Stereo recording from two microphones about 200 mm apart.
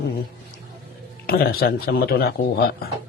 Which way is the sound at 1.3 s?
50° left (ahead or behind).